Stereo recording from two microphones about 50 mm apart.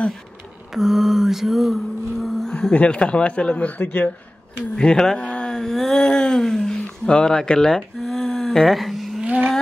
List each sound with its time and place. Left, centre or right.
0.7 s music: centre
2.7 s speech: left
4.6 s speech: centre